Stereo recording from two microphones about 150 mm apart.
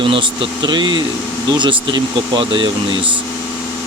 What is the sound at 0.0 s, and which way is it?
Speech, 35° right (ahead or behind).